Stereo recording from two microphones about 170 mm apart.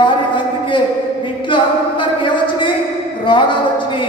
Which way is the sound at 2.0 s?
30° left (ahead or behind).